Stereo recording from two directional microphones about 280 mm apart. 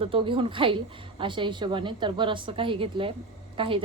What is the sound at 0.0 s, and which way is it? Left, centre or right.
A woman's voice, centre.